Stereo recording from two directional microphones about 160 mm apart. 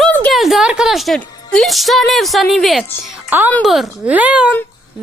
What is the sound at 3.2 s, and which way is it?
Speech, 10° right (ahead or behind).